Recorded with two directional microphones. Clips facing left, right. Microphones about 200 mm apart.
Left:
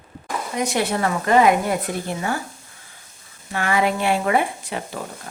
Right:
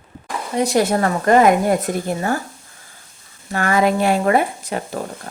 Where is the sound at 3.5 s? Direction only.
45° right (ahead or behind).